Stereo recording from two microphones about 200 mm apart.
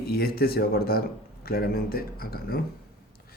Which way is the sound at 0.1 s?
50° left (ahead or behind).